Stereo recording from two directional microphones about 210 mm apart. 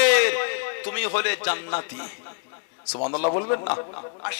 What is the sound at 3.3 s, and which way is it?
Speech, 15° left (ahead or behind).